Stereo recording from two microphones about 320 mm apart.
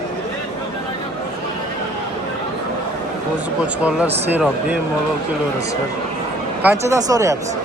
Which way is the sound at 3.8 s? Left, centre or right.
Centre.